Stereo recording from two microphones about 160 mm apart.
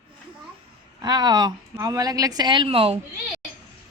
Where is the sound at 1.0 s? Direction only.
25° right (ahead or behind).